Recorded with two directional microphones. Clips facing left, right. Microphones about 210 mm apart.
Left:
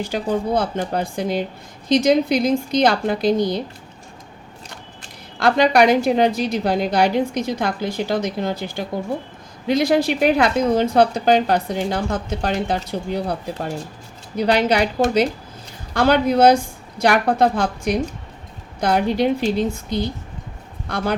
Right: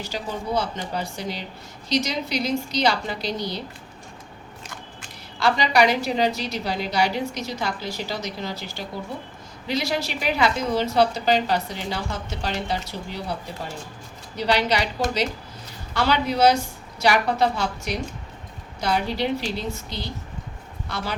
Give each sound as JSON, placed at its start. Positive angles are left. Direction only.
{"t": 0.0, "sound": "a woman's voice", "side_deg": 55}
{"t": 5.4, "sound": "a woman's voice", "side_deg": 55}
{"t": 20.8, "sound": "speech", "side_deg": 50}